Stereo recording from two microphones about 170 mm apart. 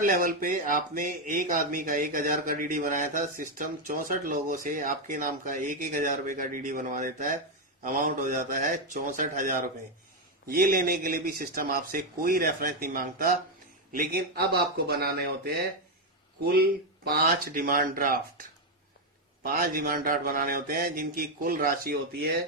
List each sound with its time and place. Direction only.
0.0 s speech: 55° right (ahead or behind)